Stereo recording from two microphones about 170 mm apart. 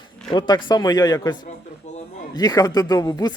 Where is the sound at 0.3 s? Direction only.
25° left (ahead or behind).